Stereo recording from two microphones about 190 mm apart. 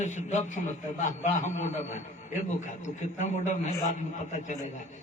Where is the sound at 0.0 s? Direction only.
40° left (ahead or behind).